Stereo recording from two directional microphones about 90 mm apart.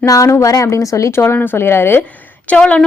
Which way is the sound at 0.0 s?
40° left (ahead or behind).